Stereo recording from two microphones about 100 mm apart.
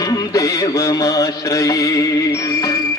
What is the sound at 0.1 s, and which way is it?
Music, 35° left (ahead or behind).